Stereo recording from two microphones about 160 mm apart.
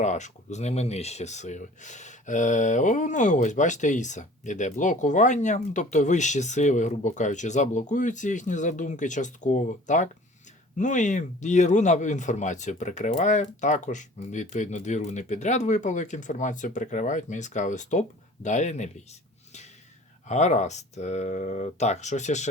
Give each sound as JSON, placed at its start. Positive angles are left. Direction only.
{"t": 0.0, "sound": "speech", "side_deg": 45}
{"t": 20.2, "sound": "speech", "side_deg": 45}